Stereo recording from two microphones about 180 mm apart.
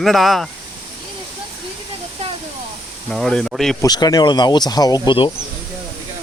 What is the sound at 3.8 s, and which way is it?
Speech, 20° left (ahead or behind).